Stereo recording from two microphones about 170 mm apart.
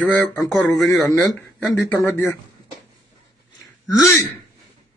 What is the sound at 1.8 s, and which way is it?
Speech, 15° left (ahead or behind).